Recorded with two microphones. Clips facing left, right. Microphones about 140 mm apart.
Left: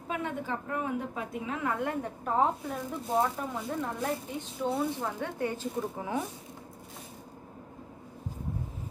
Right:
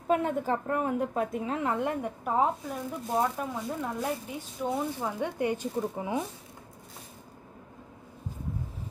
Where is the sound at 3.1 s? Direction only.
10° right (ahead or behind).